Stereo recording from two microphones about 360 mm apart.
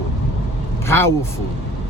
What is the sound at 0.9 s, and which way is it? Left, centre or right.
Speech, centre.